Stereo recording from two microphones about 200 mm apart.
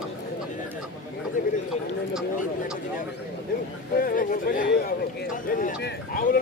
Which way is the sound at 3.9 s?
45° left (ahead or behind).